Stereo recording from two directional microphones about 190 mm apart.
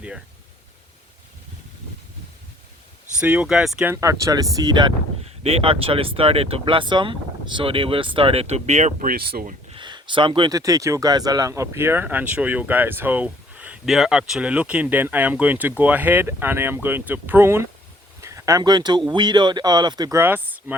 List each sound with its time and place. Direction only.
3.2 s speech: 5° right (ahead or behind)
3.9 s speech: 15° right (ahead or behind); by 9.6 s 50° right (ahead or behind)
9.6 s speech: 25° right (ahead or behind)